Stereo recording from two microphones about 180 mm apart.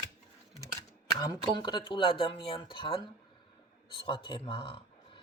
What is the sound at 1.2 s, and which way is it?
Speech, 25° left (ahead or behind).